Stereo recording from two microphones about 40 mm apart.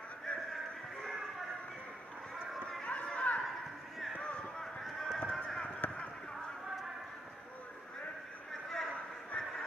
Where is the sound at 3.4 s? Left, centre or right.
Centre.